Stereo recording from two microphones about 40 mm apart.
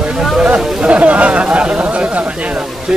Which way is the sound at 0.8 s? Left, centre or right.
Right.